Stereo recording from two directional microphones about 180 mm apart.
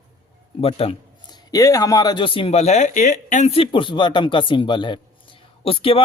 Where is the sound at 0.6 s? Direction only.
35° left (ahead or behind).